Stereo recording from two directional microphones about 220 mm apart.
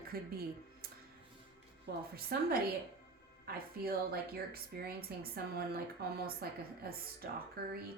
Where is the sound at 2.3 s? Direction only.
45° right (ahead or behind).